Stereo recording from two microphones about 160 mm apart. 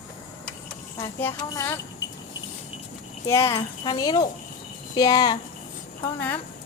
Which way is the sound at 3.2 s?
20° left (ahead or behind).